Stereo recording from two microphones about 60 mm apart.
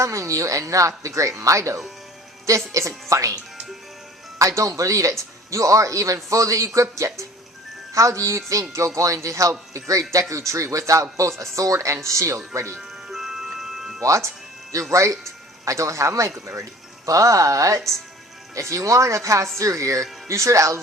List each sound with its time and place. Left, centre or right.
0.0 s speech: right
4.4 s speech: right
13.1 s music: centre
14.0 s speech: right